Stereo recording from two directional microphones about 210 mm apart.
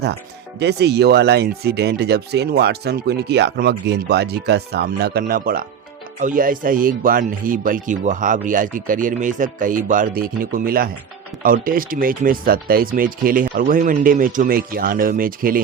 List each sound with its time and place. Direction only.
0.6 s speech: 55° right (ahead or behind)